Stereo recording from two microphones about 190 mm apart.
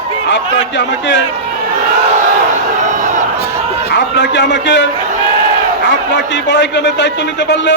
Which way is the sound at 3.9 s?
65° left (ahead or behind).